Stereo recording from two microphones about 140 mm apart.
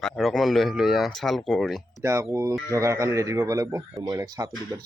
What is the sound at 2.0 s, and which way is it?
Speech, 20° right (ahead or behind).